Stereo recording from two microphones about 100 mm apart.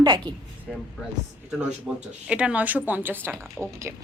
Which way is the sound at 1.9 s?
10° right (ahead or behind).